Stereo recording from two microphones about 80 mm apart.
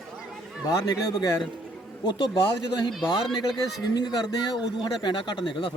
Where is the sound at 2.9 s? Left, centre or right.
Centre.